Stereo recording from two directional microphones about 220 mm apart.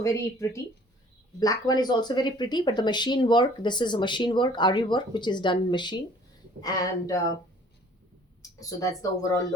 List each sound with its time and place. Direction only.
0.0 s speech: 15° left (ahead or behind)
8.4 s speech: 15° left (ahead or behind)